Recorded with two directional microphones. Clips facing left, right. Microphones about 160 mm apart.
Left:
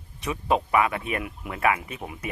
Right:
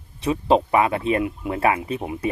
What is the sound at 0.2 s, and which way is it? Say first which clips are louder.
Speech: right 6 dB; 30° right (ahead or behind).